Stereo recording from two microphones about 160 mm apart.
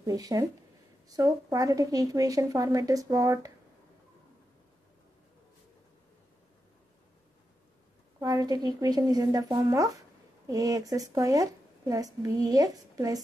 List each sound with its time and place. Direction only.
0.0 s speech: 20° right (ahead or behind)
8.2 s speech: 25° right (ahead or behind)